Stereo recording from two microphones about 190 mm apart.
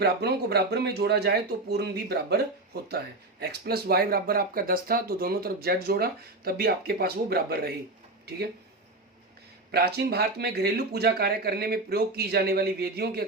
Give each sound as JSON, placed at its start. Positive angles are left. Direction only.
{"t": 0.0, "sound": "speech", "side_deg": -60}
{"t": 3.4, "sound": "speech", "side_deg": -55}
{"t": 9.7, "sound": "speech", "side_deg": -55}